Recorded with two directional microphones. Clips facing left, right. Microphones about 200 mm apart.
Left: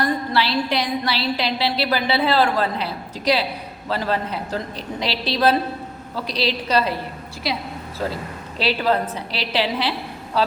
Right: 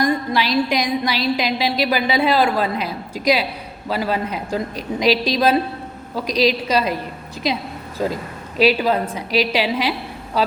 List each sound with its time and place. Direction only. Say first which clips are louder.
0.0 s a woman's voice: right 2 dB; 15° right (ahead or behind)